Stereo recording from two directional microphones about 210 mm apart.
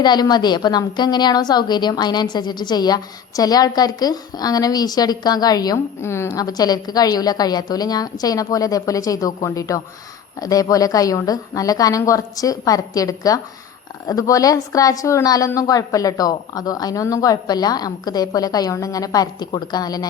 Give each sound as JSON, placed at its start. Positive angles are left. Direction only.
{"t": 0.0, "sound": "a woman's voice", "side_deg": 20}